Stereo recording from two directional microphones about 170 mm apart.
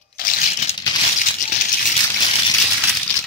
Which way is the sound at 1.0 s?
50° left (ahead or behind).